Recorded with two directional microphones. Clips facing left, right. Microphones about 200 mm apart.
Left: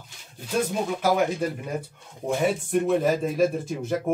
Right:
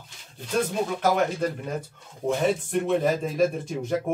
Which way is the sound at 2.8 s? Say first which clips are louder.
Even; 5° left (ahead or behind).